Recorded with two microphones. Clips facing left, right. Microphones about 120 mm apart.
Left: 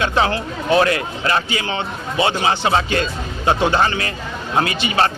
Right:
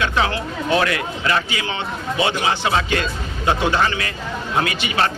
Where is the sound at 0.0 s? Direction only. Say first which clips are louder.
Left 2 dB; 35° left (ahead or behind).